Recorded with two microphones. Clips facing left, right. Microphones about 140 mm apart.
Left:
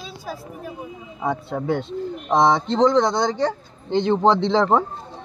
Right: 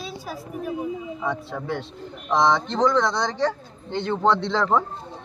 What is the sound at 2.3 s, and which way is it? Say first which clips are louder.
Speech: left 2 dB; 45° left (ahead or behind).